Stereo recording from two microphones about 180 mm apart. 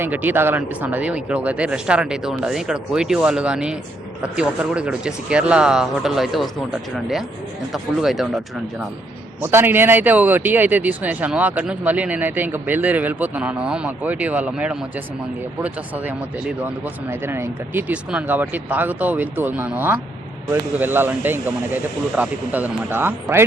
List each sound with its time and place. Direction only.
0.0 s speech: 10° right (ahead or behind)
9.4 s speech: 15° right (ahead or behind)
16.6 s speech: 10° right (ahead or behind)